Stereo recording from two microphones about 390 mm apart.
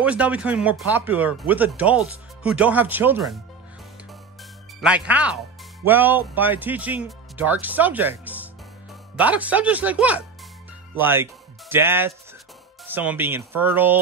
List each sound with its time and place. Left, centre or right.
0.0 s speech: centre
4.7 s speech: centre